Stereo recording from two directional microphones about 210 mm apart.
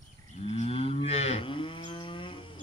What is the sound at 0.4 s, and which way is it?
Moo, 30° left (ahead or behind).